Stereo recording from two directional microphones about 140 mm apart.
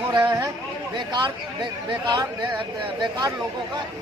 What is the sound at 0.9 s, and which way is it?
Speech, 30° right (ahead or behind).